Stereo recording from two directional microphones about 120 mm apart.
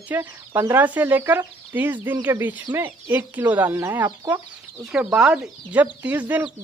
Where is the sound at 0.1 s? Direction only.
20° right (ahead or behind).